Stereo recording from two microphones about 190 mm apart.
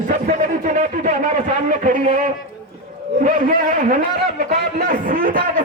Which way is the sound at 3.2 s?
40° right (ahead or behind).